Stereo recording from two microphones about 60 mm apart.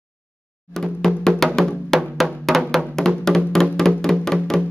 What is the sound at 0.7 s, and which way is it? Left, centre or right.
Music, centre.